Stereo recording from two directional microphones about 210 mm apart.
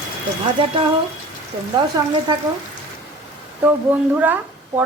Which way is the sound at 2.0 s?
20° right (ahead or behind).